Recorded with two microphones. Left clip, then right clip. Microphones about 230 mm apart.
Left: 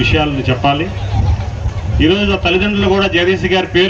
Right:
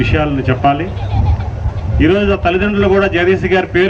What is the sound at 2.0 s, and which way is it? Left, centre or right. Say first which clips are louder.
A man's voice: right 1 dB; left.